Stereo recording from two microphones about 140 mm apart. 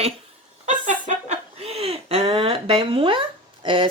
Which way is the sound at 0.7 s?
60° right (ahead or behind).